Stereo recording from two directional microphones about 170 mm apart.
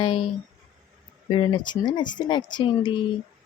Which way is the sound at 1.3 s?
25° left (ahead or behind).